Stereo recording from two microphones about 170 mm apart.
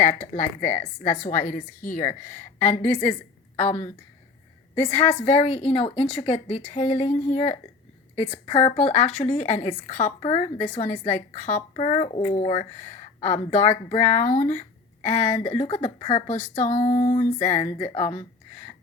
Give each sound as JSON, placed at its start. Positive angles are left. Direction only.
{"t": 0.0, "sound": "a woman's voice", "side_deg": 45}
{"t": 4.7, "sound": "speech", "side_deg": 30}
{"t": 16.8, "sound": "a sound", "side_deg": 25}
{"t": 17.3, "sound": "a woman's voice", "side_deg": 45}
{"t": 17.7, "sound": "speech", "side_deg": 30}